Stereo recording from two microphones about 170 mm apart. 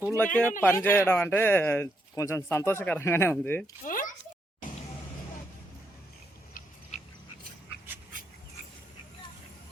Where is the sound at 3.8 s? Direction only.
50° left (ahead or behind).